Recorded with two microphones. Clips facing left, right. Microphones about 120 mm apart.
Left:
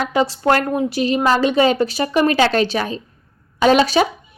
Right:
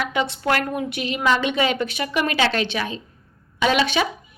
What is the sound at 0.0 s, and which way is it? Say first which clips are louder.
A woman's voice: left 6 dB; 35° left (ahead or behind).